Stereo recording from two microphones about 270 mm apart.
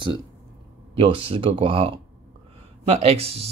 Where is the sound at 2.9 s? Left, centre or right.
Right.